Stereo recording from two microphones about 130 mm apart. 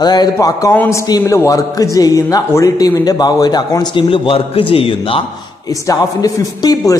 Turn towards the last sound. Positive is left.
turn(degrees=30)  # may be behind; listen again after turning